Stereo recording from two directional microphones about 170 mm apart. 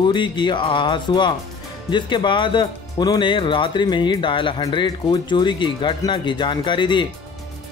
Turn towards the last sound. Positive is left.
turn(degrees=30)  # may be behind; listen again after turning